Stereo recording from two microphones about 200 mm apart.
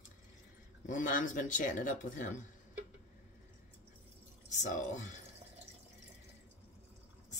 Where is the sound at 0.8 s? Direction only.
40° left (ahead or behind).